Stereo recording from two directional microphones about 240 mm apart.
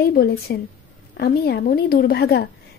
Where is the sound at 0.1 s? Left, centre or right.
Left.